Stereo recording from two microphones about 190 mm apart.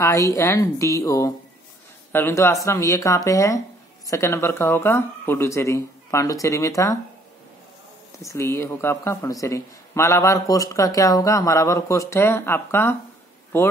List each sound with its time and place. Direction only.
0.0 s speech: 15° left (ahead or behind)
8.2 s speech: 15° left (ahead or behind)